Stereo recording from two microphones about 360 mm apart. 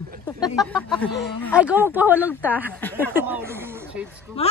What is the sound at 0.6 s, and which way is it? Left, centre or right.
Speech, centre.